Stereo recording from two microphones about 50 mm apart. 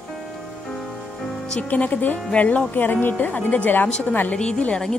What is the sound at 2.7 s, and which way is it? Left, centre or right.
Speech, left.